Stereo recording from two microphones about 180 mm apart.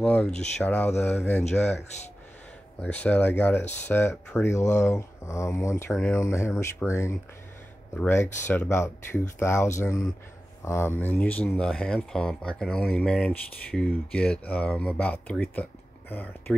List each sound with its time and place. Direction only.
0.0 s speech: 5° left (ahead or behind)
2.8 s speech: 5° left (ahead or behind)
3.6 s speech: 40° left (ahead or behind)
3.9 s speech: 10° left (ahead or behind)